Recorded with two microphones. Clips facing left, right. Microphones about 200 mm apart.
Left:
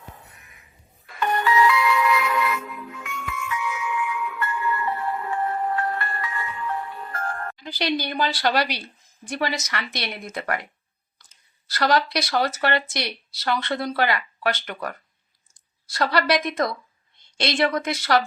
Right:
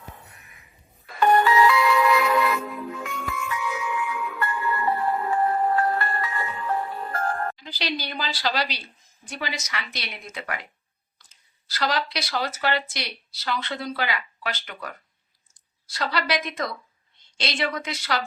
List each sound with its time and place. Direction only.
1.0 s music: 35° right (ahead or behind)
7.6 s a woman's voice: 55° left (ahead or behind)
11.7 s speech: 60° left (ahead or behind)
16.0 s speech: 60° left (ahead or behind)
17.4 s a woman's voice: 50° left (ahead or behind)